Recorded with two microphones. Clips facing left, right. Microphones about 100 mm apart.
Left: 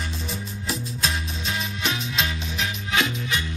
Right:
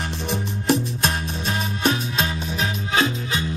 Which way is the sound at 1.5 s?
45° right (ahead or behind).